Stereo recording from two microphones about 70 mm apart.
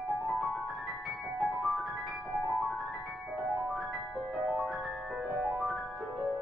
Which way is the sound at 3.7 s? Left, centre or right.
Centre.